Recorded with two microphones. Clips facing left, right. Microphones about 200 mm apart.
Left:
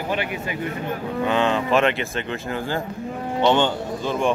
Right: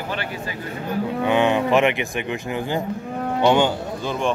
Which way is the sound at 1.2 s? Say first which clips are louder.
Right 2 dB; 15° right (ahead or behind).